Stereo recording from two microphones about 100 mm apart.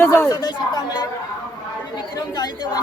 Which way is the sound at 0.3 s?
40° left (ahead or behind).